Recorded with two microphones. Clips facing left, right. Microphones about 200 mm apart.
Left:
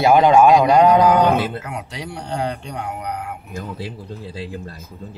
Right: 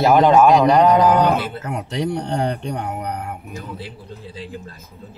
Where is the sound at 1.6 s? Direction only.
40° right (ahead or behind).